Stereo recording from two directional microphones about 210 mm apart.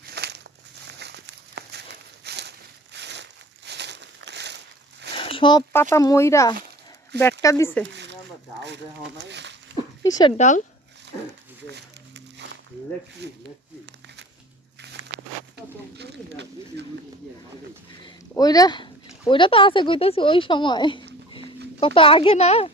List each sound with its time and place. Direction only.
0.0 s crumpling: 50° right (ahead or behind)
0.9 s a sound: 55° right (ahead or behind)
3.7 s crumpling: 55° right (ahead or behind)
5.1 s a sound: 25° left (ahead or behind)
5.7 s speech: 15° left (ahead or behind)
8.6 s speech: 55° right (ahead or behind)
10.0 s speech: 20° left (ahead or behind)
10.3 s speech: 35° left (ahead or behind)
11.6 s music: 55° right (ahead or behind)
13.2 s speech: 55° right (ahead or behind)
16.0 s a sound: 55° right (ahead or behind)
18.0 s a child's voice: 20° left (ahead or behind)